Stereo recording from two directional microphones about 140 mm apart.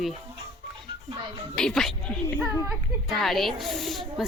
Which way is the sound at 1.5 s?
5° left (ahead or behind).